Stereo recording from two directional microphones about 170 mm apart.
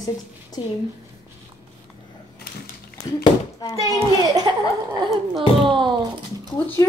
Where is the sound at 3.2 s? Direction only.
25° left (ahead or behind).